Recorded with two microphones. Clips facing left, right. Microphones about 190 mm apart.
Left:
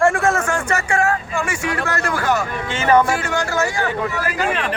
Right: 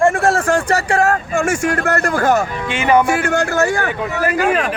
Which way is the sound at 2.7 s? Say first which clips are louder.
Right 1 dB; 15° right (ahead or behind).